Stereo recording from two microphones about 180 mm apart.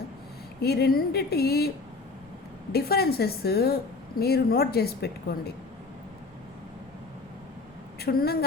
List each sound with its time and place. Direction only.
0.6 s speech: 60° left (ahead or behind)
2.7 s speech: 60° left (ahead or behind)
7.9 s a woman's voice: 60° left (ahead or behind)